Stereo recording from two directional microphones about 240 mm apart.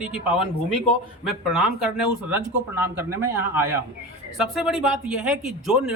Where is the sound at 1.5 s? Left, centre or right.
Centre.